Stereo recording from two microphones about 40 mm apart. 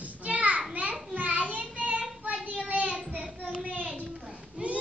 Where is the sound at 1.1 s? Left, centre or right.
Right.